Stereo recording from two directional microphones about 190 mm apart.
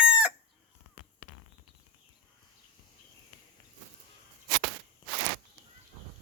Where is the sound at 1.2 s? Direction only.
60° left (ahead or behind).